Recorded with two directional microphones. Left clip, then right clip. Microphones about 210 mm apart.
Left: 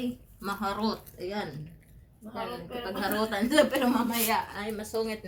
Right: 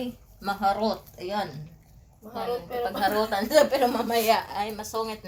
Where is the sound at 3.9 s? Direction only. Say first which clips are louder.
Right 5 dB; 30° right (ahead or behind).